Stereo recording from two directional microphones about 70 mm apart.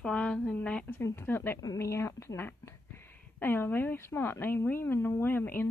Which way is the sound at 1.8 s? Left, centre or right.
Left.